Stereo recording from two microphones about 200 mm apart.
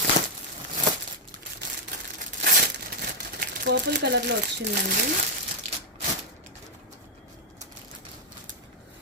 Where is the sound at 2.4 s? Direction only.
50° right (ahead or behind).